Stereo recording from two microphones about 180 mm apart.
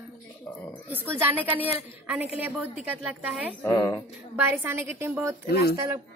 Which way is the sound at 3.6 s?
20° left (ahead or behind).